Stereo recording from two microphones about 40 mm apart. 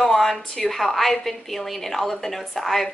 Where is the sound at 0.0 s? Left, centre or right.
Centre.